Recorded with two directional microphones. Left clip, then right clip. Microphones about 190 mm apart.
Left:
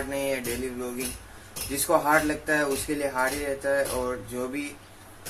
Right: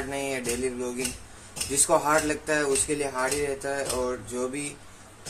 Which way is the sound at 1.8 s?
10° right (ahead or behind).